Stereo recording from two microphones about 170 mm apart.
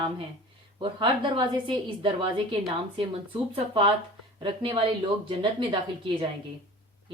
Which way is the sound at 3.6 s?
35° right (ahead or behind).